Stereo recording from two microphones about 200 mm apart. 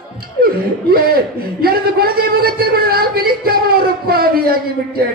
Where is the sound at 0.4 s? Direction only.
50° right (ahead or behind).